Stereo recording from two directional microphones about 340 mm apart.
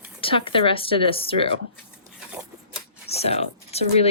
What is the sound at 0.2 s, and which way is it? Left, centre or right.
Speech, centre.